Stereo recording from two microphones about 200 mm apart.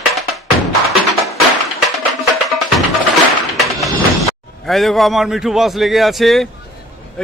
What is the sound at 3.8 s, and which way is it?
Speech, centre (ahead or behind).